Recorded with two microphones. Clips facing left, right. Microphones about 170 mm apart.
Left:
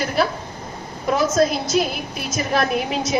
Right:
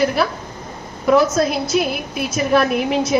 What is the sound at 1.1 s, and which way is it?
A woman's voice, 55° right (ahead or behind).